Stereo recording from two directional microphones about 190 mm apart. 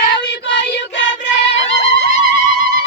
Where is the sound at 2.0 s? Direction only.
35° left (ahead or behind).